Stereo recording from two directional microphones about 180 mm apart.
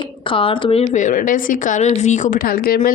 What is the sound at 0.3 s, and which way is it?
A woman's voice, 30° left (ahead or behind).